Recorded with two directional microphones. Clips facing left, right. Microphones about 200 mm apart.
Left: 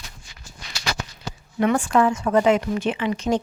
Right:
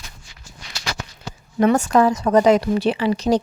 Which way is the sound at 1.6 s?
40° right (ahead or behind).